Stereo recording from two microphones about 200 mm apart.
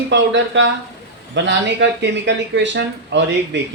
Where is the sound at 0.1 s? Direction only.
65° right (ahead or behind).